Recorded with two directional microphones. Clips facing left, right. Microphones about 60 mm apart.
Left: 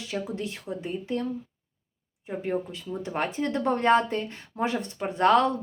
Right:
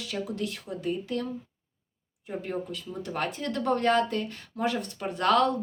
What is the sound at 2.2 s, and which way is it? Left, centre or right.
A woman's voice, left.